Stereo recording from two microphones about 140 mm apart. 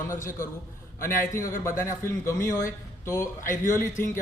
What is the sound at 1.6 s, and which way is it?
Speech, 20° left (ahead or behind).